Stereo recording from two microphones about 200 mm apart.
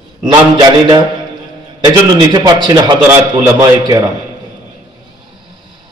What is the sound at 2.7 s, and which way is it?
A man's voice, 20° right (ahead or behind).